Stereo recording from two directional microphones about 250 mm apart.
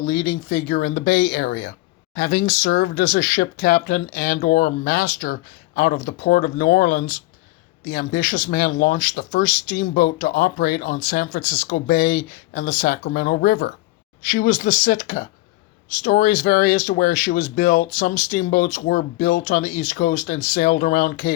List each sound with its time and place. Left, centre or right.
0.0 s speech: left